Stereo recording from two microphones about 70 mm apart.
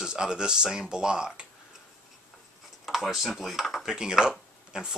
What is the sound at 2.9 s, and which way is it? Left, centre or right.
Speech, centre.